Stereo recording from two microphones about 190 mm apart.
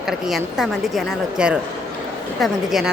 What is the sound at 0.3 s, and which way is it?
A woman's voice, centre (ahead or behind).